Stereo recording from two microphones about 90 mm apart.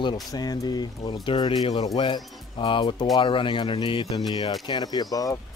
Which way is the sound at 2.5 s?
65° left (ahead or behind).